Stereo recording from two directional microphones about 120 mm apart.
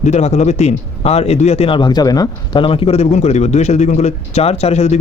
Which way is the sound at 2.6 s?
50° left (ahead or behind).